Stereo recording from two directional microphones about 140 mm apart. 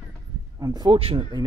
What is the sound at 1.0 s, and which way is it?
Speech, 45° right (ahead or behind).